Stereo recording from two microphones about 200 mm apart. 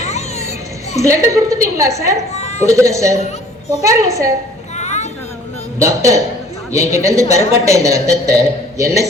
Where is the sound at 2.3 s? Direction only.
35° left (ahead or behind).